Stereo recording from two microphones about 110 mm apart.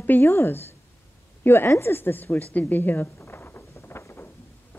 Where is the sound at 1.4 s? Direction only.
25° left (ahead or behind).